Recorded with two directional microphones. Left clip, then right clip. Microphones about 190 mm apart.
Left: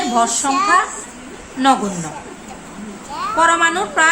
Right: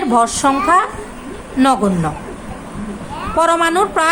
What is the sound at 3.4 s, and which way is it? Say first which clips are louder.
Speech: right 1 dB; 35° right (ahead or behind).